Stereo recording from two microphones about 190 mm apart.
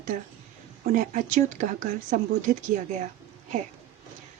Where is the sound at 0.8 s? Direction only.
40° right (ahead or behind).